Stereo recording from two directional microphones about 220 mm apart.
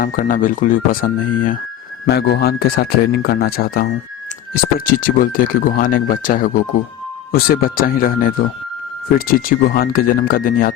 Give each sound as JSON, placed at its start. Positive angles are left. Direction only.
{"t": 0.0, "sound": "speech", "side_deg": 40}
{"t": 4.9, "sound": "speech", "side_deg": 40}